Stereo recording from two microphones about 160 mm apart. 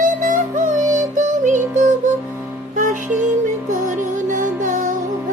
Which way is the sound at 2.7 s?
55° right (ahead or behind).